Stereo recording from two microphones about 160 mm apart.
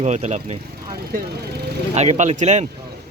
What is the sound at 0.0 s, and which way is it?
Speech, 45° right (ahead or behind).